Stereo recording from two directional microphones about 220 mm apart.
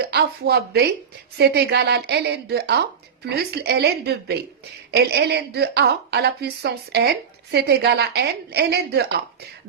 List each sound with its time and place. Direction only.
0.0 s a woman's voice: 50° right (ahead or behind)